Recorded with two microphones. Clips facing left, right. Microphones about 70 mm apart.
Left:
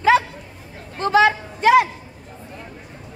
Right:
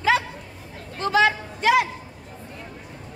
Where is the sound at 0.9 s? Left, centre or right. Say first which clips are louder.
Left 4 dB; left.